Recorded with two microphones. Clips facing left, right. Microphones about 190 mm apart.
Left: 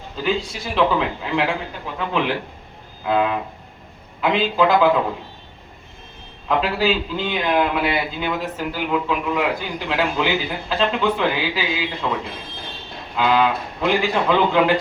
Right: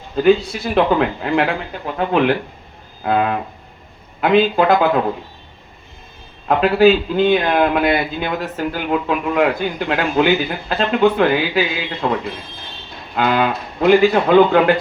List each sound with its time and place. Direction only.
0.2 s a man's voice: 55° right (ahead or behind)
6.5 s a man's voice: 55° right (ahead or behind)